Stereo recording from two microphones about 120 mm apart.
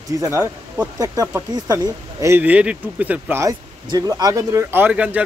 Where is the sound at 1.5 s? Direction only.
35° right (ahead or behind).